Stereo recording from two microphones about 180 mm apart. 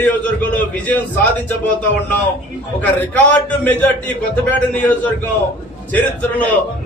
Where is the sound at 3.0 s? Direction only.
10° left (ahead or behind).